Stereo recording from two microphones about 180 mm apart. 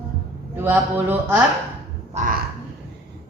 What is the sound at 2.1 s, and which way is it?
Speech, 45° right (ahead or behind).